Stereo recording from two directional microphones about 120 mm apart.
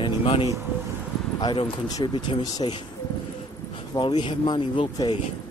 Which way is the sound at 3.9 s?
40° left (ahead or behind).